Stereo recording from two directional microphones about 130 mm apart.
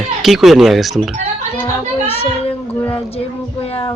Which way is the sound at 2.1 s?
50° left (ahead or behind).